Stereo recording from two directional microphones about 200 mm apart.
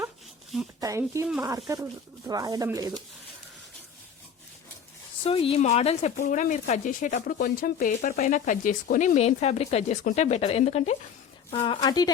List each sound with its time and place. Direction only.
0.8 s speech: 15° right (ahead or behind)
5.2 s speech: 30° left (ahead or behind)